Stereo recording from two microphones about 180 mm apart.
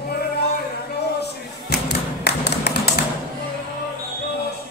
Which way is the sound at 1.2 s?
65° left (ahead or behind).